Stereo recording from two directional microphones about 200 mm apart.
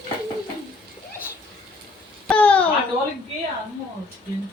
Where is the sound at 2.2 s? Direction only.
5° left (ahead or behind).